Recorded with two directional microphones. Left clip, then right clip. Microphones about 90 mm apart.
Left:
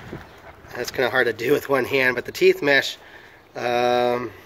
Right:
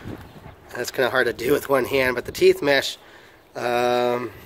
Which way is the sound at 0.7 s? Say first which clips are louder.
Even; 15° right (ahead or behind).